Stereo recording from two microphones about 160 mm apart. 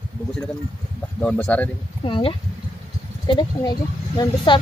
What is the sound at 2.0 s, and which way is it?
Speech, 35° left (ahead or behind).